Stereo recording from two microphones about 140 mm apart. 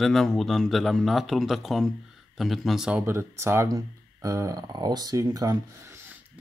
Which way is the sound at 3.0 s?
15° right (ahead or behind).